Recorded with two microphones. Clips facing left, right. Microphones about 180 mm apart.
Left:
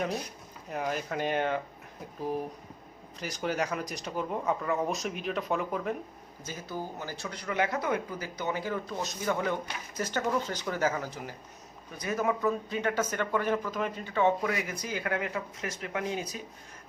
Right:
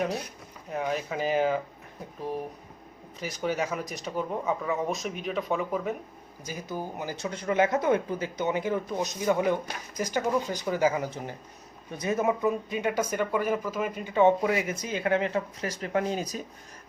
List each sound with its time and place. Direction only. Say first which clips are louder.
0.7 s speech: right 2 dB; centre (ahead or behind)
3.2 s speech: right 2 dB; centre (ahead or behind)
6.4 s speech: right 3 dB; 15° right (ahead or behind); by 16.4 s 40° right (ahead or behind)